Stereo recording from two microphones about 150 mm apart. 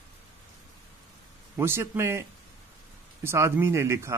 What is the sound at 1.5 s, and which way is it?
A man's voice, 15° right (ahead or behind).